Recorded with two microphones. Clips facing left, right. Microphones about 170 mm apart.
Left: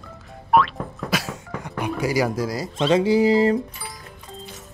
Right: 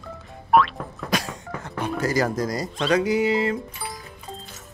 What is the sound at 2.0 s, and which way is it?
Speech, 10° left (ahead or behind).